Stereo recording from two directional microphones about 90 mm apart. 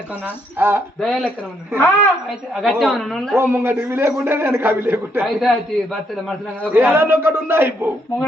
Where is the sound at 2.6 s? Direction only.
5° left (ahead or behind).